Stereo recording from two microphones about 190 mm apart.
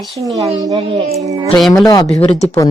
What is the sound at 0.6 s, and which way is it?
Child singing, 20° right (ahead or behind).